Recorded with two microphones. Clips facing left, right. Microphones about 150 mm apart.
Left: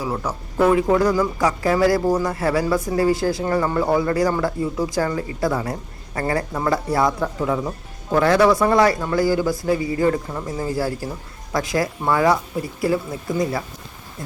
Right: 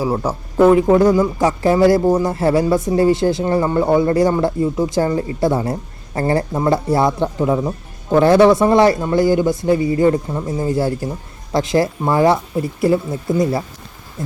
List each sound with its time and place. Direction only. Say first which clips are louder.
0.0 s a man's voice: right 6 dB; 30° right (ahead or behind)
13.4 s a man's voice: right 4 dB; 25° right (ahead or behind)